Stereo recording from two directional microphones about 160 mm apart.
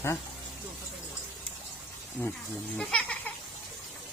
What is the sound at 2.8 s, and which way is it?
Goat, 5° left (ahead or behind).